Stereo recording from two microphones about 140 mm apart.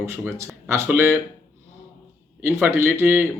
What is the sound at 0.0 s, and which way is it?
Speech, 20° right (ahead or behind).